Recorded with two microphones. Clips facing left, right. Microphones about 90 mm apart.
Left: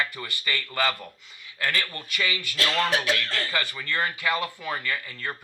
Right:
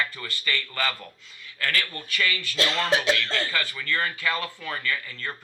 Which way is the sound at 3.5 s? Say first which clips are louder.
Even; 20° left (ahead or behind).